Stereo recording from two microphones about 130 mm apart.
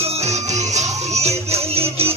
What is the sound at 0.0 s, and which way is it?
Music, 55° right (ahead or behind).